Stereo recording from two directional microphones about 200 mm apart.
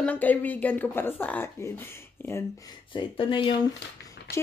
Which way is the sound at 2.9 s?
25° left (ahead or behind).